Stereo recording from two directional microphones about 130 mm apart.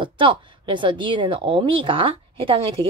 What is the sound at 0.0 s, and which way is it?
Speech, 40° right (ahead or behind).